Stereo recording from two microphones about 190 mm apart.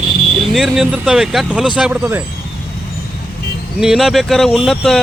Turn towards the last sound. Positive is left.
turn(degrees=0)  # may be behind; listen again after turning